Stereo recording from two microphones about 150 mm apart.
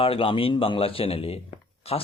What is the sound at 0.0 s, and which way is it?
Speech, 35° left (ahead or behind).